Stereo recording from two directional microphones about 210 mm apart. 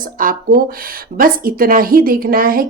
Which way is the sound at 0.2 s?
40° right (ahead or behind).